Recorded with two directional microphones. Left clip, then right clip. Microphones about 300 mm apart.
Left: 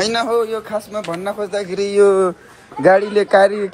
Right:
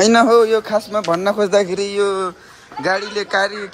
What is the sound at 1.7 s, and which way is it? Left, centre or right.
Speech, centre.